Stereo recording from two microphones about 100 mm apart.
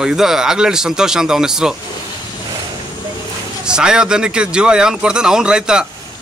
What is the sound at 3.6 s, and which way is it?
Speech, 5° right (ahead or behind).